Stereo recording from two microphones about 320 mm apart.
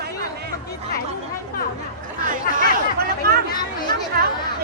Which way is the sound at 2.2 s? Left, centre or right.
Right.